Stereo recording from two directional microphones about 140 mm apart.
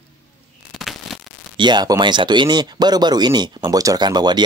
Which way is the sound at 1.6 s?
30° right (ahead or behind).